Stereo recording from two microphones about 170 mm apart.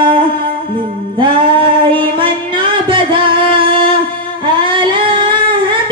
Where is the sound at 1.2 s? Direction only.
30° right (ahead or behind).